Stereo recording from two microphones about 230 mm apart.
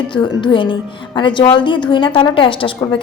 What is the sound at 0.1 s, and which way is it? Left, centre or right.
A woman's voice, left.